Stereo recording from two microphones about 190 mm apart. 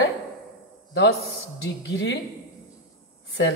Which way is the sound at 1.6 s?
65° left (ahead or behind).